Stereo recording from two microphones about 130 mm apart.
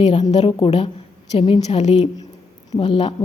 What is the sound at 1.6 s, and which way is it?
Speech, 55° left (ahead or behind).